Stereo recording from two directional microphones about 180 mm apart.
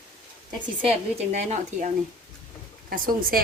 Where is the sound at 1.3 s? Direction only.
40° right (ahead or behind).